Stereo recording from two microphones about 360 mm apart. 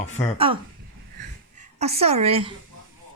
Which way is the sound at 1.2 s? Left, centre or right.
Centre.